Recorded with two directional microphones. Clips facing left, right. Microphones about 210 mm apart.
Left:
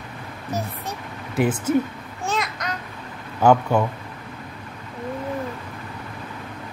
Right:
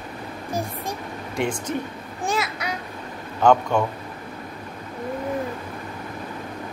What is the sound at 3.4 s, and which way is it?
Speech, 10° left (ahead or behind).